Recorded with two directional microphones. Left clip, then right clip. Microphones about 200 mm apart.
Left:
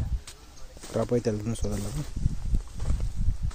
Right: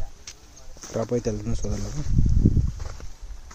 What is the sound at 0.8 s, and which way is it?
Speech, 5° right (ahead or behind).